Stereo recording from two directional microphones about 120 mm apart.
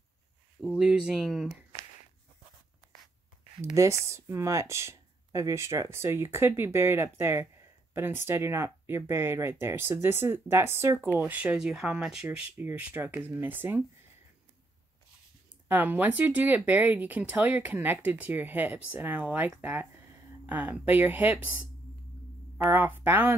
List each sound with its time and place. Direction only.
0.7 s speech: 5° right (ahead or behind)
3.7 s speech: 25° right (ahead or behind)
15.7 s speech: 15° right (ahead or behind)
22.7 s speech: 15° right (ahead or behind)